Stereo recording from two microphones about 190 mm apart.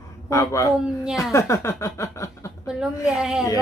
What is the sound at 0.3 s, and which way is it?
A man's voice, 15° left (ahead or behind).